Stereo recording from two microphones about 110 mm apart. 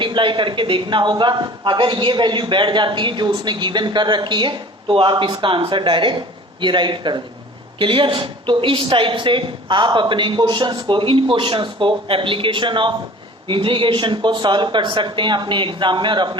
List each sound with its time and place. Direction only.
0.0 s a man's voice: 45° right (ahead or behind)